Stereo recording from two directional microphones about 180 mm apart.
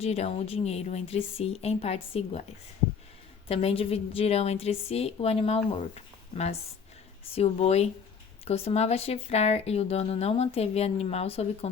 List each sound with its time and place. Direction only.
0.0 s speech: 35° left (ahead or behind)
3.5 s speech: 35° left (ahead or behind)